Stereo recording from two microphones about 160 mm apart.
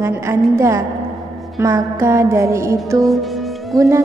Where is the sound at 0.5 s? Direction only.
20° right (ahead or behind).